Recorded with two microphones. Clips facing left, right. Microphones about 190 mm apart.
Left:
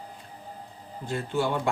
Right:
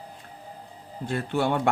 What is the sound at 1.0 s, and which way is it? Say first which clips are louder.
Speech: right 2 dB; 60° right (ahead or behind).